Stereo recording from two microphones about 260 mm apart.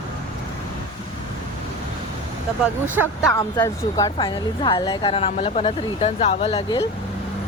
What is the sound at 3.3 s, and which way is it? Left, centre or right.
Speech, centre.